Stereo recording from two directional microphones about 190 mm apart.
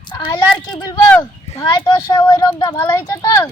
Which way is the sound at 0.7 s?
10° left (ahead or behind).